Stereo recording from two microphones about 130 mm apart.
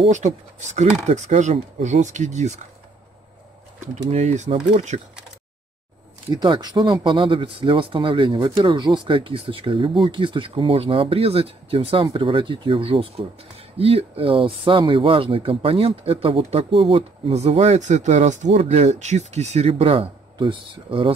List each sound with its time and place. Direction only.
0.1 s speech: 65° right (ahead or behind)
3.8 s speech: 60° right (ahead or behind)
6.3 s speech: 35° right (ahead or behind)